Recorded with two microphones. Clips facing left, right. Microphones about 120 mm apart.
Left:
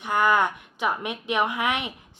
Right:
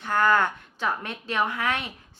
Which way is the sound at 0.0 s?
15° left (ahead or behind).